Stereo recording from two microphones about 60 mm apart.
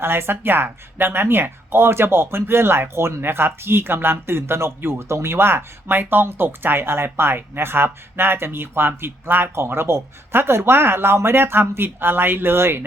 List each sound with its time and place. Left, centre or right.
0.0 s speech: right